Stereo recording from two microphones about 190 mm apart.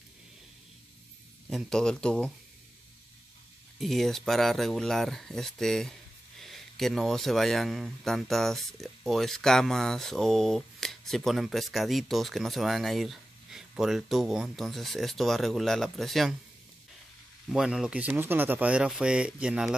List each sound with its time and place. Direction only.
1.5 s speech: centre (ahead or behind)
3.8 s speech: centre (ahead or behind)
17.5 s speech: centre (ahead or behind)